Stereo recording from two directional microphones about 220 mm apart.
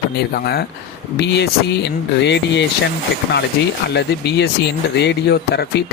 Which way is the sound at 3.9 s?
50° left (ahead or behind).